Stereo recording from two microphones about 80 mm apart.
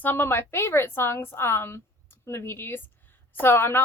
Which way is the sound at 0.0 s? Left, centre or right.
Left.